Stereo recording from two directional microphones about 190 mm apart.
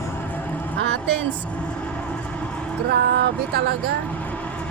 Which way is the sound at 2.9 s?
65° right (ahead or behind).